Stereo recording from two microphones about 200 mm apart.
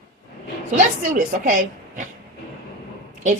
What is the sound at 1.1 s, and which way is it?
Speech, 45° right (ahead or behind).